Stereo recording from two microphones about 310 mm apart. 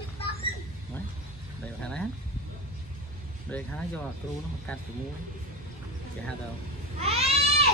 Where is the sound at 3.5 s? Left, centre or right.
Centre.